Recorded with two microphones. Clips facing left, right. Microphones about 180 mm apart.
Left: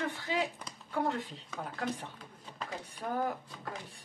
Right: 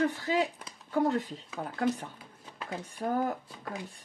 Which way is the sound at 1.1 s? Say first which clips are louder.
Right 5 dB; 40° right (ahead or behind).